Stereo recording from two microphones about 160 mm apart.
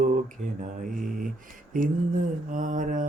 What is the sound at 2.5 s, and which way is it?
Mantra, 55° right (ahead or behind).